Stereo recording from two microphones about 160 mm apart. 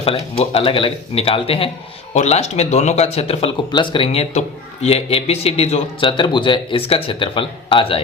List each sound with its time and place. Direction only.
0.0 s speech: 35° left (ahead or behind)